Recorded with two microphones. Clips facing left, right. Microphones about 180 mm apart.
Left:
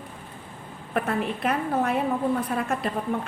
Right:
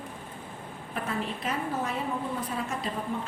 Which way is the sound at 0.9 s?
60° left (ahead or behind).